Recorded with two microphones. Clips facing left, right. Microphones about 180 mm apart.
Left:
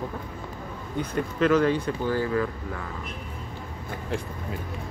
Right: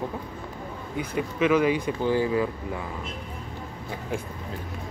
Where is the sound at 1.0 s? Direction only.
5° right (ahead or behind).